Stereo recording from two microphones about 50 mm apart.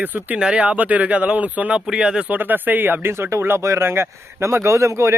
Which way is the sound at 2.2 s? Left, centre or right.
Right.